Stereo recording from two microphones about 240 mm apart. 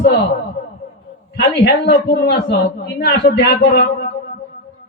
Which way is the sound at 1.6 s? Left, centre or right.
Left.